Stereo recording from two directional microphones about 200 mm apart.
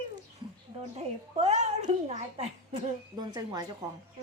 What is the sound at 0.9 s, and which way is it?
A child's voice, 35° right (ahead or behind).